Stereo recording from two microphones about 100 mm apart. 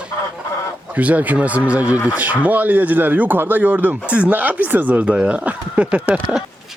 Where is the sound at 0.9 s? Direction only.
15° right (ahead or behind).